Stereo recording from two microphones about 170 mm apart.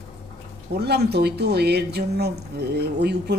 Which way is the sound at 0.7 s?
75° right (ahead or behind).